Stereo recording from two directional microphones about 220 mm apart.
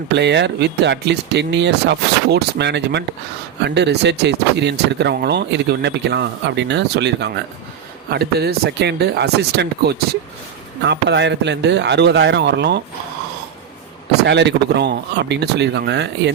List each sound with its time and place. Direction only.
0.1 s speech: 50° right (ahead or behind)
14.3 s speech: 50° right (ahead or behind)